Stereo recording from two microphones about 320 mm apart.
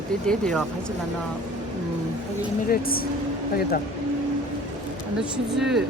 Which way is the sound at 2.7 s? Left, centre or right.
Left.